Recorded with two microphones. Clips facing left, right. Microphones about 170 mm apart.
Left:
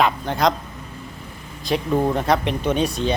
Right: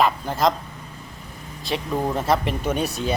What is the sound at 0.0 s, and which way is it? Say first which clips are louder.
Speech: left 1 dB; centre (ahead or behind).